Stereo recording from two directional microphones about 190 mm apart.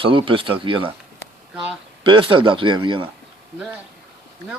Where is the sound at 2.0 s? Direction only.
25° right (ahead or behind).